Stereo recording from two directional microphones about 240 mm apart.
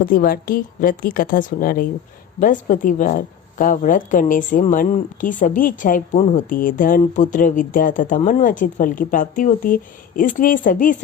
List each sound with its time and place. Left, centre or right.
0.0 s a woman's voice: left